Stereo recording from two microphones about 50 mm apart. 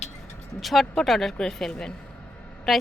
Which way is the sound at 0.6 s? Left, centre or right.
Centre.